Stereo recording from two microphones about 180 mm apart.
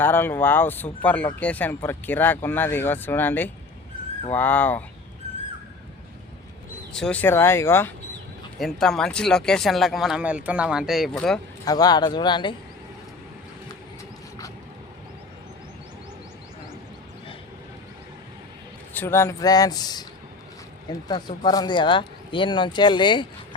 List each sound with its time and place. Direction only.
0.0 s speech: 10° left (ahead or behind)
6.9 s speech: 5° left (ahead or behind)
8.5 s speech: centre (ahead or behind)
11.6 s speech: 20° left (ahead or behind)
18.9 s speech: 15° left (ahead or behind)